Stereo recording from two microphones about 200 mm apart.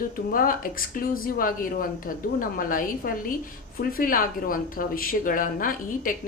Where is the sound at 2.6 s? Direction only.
45° left (ahead or behind).